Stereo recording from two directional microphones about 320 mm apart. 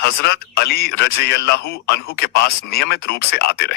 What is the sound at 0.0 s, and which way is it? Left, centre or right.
A man's voice, left.